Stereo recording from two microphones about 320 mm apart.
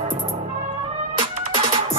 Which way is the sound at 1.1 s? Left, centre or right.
Centre.